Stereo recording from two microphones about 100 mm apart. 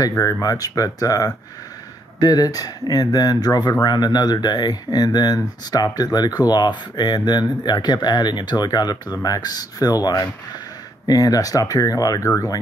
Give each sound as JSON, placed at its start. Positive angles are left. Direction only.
{"t": 0.2, "sound": "speech", "side_deg": 35}